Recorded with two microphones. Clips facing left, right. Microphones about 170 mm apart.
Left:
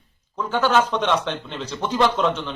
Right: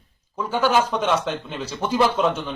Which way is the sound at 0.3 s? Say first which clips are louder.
Even; 10° right (ahead or behind).